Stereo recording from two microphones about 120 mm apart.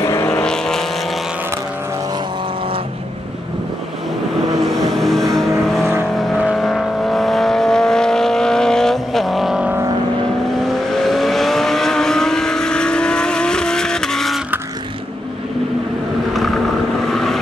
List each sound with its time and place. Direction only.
0.0 s vehicle: 25° left (ahead or behind)
0.3 s vehicle: 5° left (ahead or behind)
4.6 s vehicle: centre (ahead or behind)
17.1 s vehicle: centre (ahead or behind)